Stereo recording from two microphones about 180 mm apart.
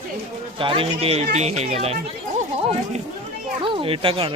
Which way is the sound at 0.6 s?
30° right (ahead or behind).